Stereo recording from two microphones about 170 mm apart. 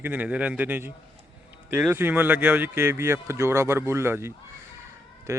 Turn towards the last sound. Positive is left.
turn(degrees=-20)  # may be behind; listen again after turning